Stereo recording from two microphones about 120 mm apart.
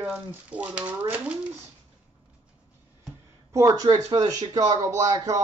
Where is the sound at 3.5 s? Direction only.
25° right (ahead or behind).